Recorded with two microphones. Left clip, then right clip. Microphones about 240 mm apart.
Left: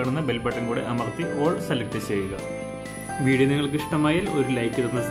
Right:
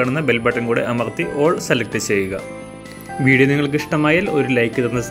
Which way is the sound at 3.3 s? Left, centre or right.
Centre.